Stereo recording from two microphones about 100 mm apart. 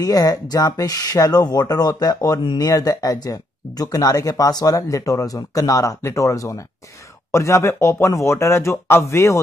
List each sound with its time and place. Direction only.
0.0 s speech: 40° left (ahead or behind)